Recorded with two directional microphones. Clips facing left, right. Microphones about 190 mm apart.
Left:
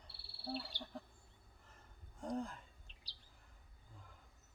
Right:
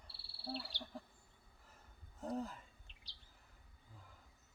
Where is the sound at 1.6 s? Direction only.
10° right (ahead or behind).